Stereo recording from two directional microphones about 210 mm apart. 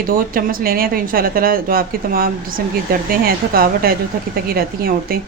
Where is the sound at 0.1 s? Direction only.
40° right (ahead or behind).